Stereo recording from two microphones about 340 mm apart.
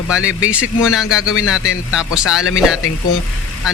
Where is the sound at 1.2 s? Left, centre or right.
Left.